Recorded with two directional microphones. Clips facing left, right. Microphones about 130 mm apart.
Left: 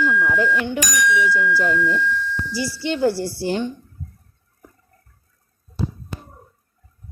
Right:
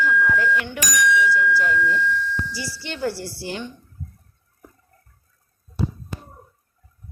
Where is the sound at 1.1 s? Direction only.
50° left (ahead or behind).